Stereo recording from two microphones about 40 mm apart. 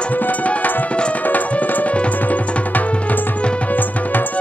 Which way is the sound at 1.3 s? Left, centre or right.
Left.